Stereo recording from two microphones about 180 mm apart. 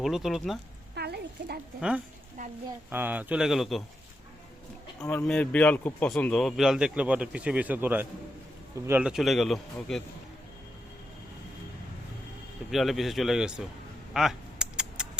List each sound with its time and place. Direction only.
0.0 s a man's voice: centre (ahead or behind)
0.9 s a sound: 65° right (ahead or behind)
2.9 s a man's voice: 10° right (ahead or behind)
4.9 s a man's voice: 10° left (ahead or behind)
12.7 s a man's voice: centre (ahead or behind)
14.1 s a sound: centre (ahead or behind)